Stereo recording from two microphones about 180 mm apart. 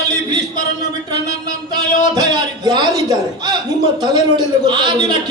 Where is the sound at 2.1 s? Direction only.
20° right (ahead or behind).